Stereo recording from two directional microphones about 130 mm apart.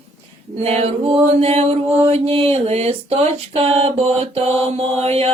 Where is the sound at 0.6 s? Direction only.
55° right (ahead or behind).